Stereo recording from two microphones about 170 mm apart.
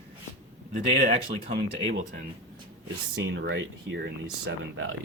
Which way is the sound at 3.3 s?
90° right.